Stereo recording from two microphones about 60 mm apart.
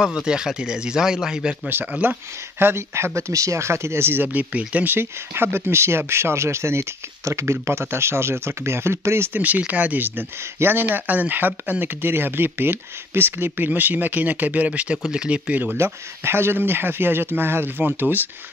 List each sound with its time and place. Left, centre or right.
0.0 s speech: centre
1.7 s speech: right
2.6 s speech: right
4.9 s speech: right
9.3 s speech: right
15.8 s speech: right